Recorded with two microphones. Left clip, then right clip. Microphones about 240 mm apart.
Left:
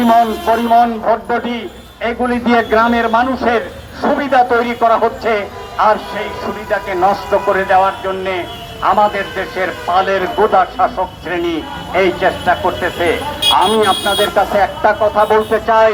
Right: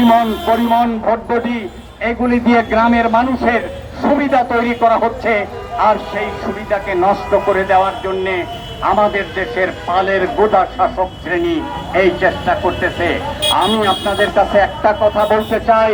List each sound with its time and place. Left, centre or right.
0.0 s speech: left